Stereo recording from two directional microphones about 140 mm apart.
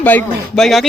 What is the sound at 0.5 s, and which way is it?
Speech, centre (ahead or behind).